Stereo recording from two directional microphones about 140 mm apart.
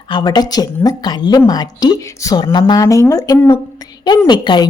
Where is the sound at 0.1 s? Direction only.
30° left (ahead or behind).